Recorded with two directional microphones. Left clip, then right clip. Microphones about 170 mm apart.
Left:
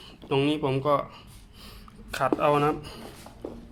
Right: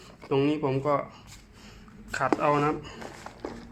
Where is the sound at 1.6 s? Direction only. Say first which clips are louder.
Left 2 dB; 10° left (ahead or behind).